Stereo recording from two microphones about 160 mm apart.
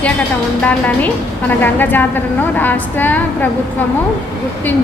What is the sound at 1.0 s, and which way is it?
A woman's voice, 10° left (ahead or behind).